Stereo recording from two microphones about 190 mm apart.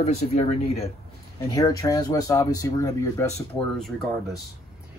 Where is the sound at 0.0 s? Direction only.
35° left (ahead or behind).